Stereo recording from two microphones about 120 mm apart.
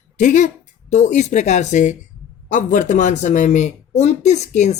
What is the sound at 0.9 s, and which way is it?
Speech, 75° left (ahead or behind).